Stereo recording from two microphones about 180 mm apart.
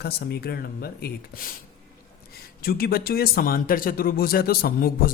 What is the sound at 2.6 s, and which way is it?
A man's voice, 55° left (ahead or behind).